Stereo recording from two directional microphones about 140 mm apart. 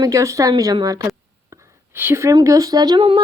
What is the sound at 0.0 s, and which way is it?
A woman's voice, 20° right (ahead or behind).